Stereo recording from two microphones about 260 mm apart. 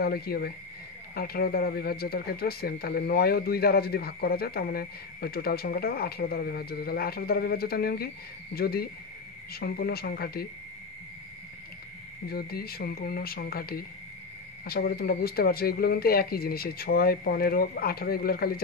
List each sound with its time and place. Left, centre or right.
0.0 s speech: left
12.3 s speech: left